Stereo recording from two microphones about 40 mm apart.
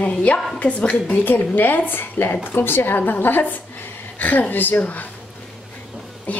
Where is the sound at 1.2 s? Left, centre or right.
Left.